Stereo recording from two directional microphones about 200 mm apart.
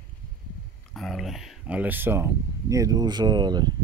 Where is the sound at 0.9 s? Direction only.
Centre (ahead or behind); by 3.7 s 20° right (ahead or behind).